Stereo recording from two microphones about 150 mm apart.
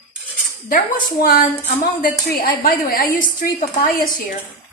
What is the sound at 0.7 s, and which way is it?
A woman's voice, 65° left (ahead or behind).